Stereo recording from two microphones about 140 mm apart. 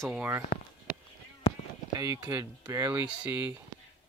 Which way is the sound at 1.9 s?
25° right (ahead or behind).